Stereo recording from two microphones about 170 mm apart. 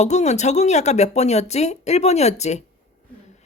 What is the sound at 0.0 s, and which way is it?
Speech, 40° left (ahead or behind).